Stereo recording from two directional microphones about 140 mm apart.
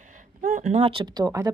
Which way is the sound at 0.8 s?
35° right (ahead or behind).